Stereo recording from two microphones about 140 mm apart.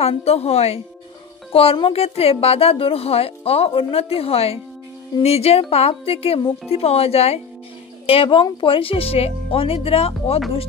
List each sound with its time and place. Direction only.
0.0 s a woman's voice: 45° left (ahead or behind)